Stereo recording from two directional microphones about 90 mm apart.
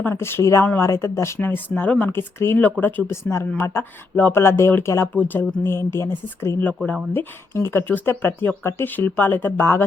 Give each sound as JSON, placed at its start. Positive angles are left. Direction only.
{"t": 0.0, "sound": "speech", "side_deg": 25}